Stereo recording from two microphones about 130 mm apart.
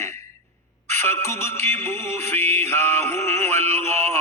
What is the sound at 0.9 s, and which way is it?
Music, 20° left (ahead or behind).